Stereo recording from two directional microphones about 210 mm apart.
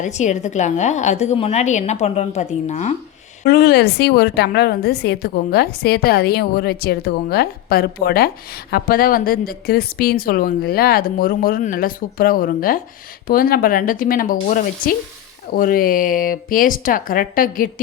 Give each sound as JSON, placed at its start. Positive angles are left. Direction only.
{"t": 0.0, "sound": "a woman's voice", "side_deg": 35}
{"t": 3.4, "sound": "a woman's voice", "side_deg": 50}